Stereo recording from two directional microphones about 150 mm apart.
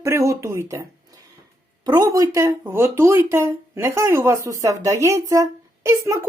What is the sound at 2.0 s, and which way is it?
Speech, 20° right (ahead or behind).